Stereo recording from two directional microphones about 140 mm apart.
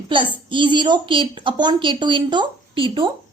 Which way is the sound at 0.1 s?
35° right (ahead or behind).